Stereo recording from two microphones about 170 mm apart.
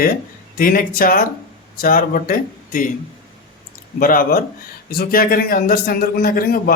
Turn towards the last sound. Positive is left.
turn(degrees=60)  # may be behind; listen again after turning